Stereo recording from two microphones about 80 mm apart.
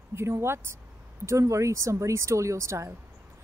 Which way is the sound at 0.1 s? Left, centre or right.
Right.